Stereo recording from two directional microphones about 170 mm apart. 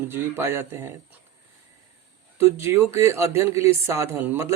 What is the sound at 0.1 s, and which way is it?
Speech, 15° right (ahead or behind).